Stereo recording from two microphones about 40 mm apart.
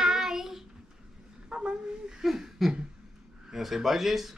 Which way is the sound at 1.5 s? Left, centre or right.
Right.